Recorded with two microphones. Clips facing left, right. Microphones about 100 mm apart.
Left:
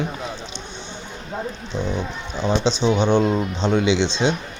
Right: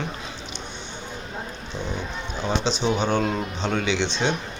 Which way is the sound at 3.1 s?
15° left (ahead or behind).